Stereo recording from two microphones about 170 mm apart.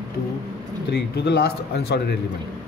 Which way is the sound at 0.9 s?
75° left (ahead or behind).